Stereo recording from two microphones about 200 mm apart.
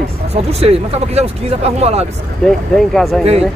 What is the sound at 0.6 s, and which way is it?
Speech, 30° right (ahead or behind).